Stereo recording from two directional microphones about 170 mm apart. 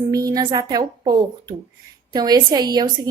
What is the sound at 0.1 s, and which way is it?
A woman's voice, 20° right (ahead or behind).